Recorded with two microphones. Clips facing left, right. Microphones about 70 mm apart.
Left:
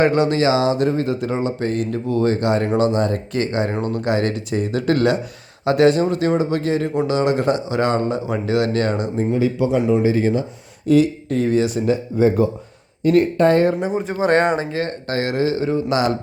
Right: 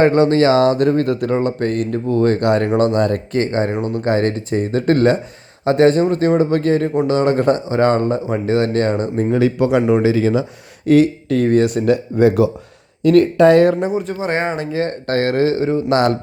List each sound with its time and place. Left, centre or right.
0.0 s speech: right
3.3 s speech: right
9.1 s speech: right
10.8 s speech: right
13.0 s speech: right
14.3 s speech: left
15.0 s speech: right